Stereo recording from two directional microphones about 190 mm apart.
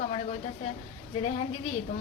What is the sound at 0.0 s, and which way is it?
Speech, 40° left (ahead or behind).